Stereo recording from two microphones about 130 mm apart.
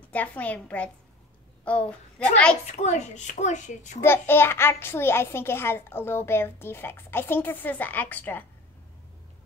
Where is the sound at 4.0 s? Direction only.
15° left (ahead or behind).